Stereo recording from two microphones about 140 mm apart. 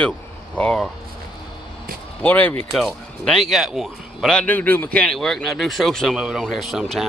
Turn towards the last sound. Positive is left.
turn(degrees=0)  # may be behind; listen again after turning